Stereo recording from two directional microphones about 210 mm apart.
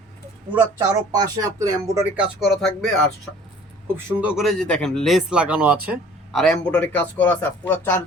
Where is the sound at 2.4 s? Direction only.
Centre (ahead or behind).